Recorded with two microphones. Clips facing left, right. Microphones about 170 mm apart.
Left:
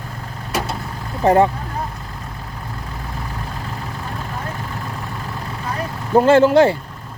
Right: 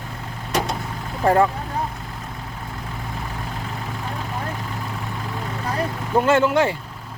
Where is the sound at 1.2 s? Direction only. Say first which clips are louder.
Left 3 dB; 20° left (ahead or behind).